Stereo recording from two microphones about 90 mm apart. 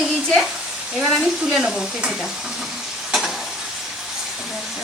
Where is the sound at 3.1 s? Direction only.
5° right (ahead or behind).